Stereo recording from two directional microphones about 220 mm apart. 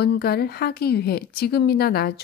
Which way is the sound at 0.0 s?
45° left (ahead or behind).